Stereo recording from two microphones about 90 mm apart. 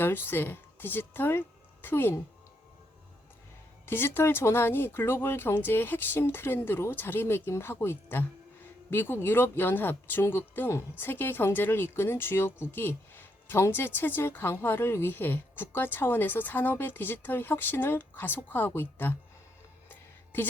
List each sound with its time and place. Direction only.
0.0 s speech: 25° left (ahead or behind)
3.8 s a woman's voice: 25° left (ahead or behind)
19.9 s a sound: 20° left (ahead or behind)